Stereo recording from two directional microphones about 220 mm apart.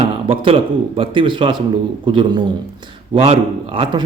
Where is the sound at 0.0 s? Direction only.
25° right (ahead or behind).